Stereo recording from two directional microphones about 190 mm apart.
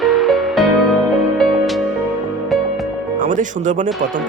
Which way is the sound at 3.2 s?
40° right (ahead or behind).